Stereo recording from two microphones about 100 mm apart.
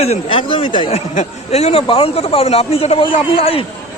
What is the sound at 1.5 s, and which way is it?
A man's voice, 90° left.